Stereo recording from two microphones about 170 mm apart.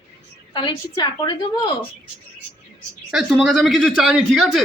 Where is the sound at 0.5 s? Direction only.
25° left (ahead or behind).